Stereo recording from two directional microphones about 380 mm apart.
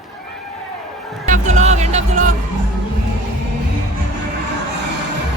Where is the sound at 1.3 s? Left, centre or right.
Centre.